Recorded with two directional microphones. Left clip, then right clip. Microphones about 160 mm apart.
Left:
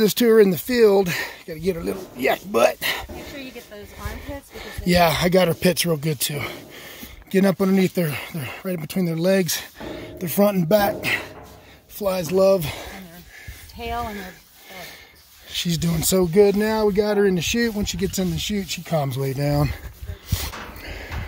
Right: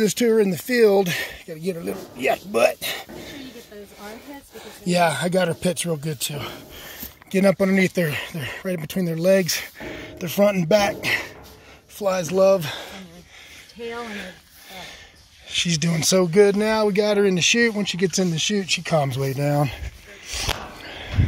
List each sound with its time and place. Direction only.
0.0 s speech: 25° left (ahead or behind)
0.7 s speech: 10° left (ahead or behind)
4.6 s speech: 30° left (ahead or behind)
7.2 s speech: 15° left (ahead or behind)
12.0 s speech: 35° left (ahead or behind)
14.0 s a sound: 35° left (ahead or behind)
15.5 s speech: 30° left (ahead or behind)
15.9 s speech: 20° left (ahead or behind)
20.3 s speech: 35° left (ahead or behind)
20.8 s a sound: 55° left (ahead or behind)